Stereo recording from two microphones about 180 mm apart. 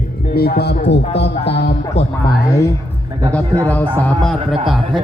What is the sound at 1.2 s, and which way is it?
Music, 70° left (ahead or behind).